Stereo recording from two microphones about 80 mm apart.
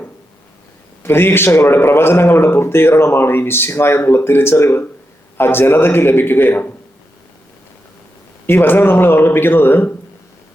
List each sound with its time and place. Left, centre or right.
1.0 s speech: left
8.4 s speech: left